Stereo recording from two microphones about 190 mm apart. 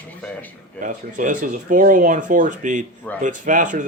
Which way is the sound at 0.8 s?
45° right (ahead or behind).